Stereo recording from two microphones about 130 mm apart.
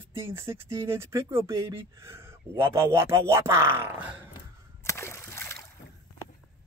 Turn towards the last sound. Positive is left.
turn(degrees=20)  # may be behind; listen again after turning